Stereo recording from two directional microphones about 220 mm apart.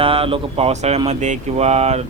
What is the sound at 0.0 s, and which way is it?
A man's voice, 25° right (ahead or behind).